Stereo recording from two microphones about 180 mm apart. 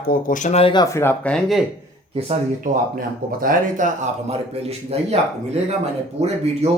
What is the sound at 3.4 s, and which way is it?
Speech, 45° right (ahead or behind).